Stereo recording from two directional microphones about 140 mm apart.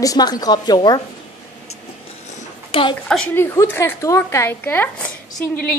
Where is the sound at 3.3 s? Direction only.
15° left (ahead or behind).